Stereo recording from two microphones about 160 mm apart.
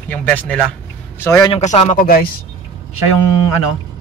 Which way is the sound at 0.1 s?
10° left (ahead or behind).